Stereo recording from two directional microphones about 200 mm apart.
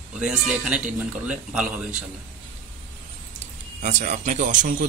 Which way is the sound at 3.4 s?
35° right (ahead or behind).